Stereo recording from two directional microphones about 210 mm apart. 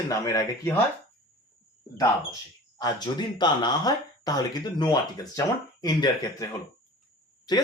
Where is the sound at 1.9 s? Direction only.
15° left (ahead or behind).